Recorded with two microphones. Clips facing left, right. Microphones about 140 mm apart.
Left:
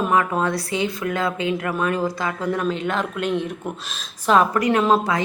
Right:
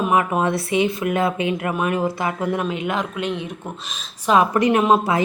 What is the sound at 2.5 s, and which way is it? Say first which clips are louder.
Speech: even; 10° right (ahead or behind).